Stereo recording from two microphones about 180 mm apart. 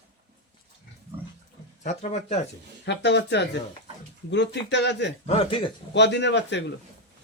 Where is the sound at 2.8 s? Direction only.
75° left (ahead or behind).